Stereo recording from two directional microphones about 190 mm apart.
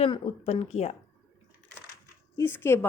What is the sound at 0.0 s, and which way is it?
Speech, 30° left (ahead or behind).